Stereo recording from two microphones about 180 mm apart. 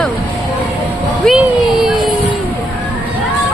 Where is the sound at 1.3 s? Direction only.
Centre (ahead or behind).